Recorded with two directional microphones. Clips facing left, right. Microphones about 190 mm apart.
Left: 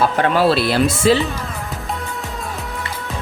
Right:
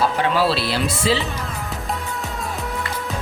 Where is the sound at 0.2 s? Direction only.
50° left (ahead or behind).